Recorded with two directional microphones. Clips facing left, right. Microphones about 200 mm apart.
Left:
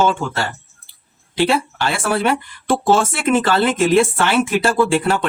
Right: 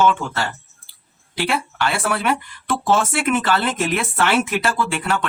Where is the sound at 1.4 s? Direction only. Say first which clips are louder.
Left 5 dB; 25° left (ahead or behind).